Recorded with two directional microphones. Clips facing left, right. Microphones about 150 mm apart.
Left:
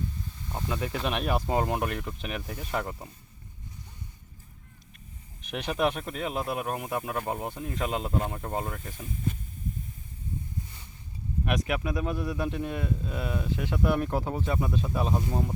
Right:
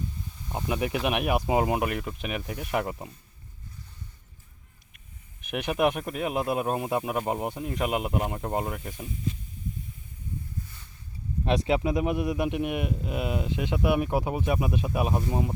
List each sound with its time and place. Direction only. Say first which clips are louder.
0.4 s speech: right 4 dB; 15° right (ahead or behind)
5.4 s speech: right 3 dB; 10° right (ahead or behind)
11.4 s speech: right 5 dB; 25° right (ahead or behind); by 15.5 s 10° right (ahead or behind)